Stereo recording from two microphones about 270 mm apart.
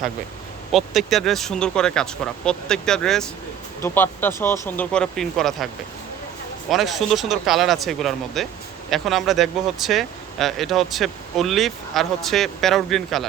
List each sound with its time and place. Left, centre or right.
0.7 s speech: centre
6.7 s speech: centre